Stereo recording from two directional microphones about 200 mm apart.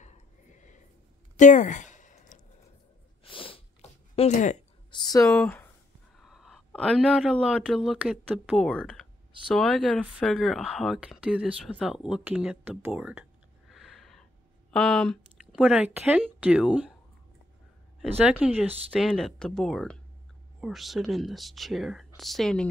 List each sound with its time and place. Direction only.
0.0 s a sound: 35° left (ahead or behind)
3.3 s sneeze: 25° left (ahead or behind)
4.1 s speech: 35° left (ahead or behind)
4.9 s speech: 20° left (ahead or behind)
5.3 s speech: 5° left (ahead or behind)
11.8 s a sound: 5° right (ahead or behind)
14.7 s speech: 5° left (ahead or behind)
18.1 s speech: 10° right (ahead or behind)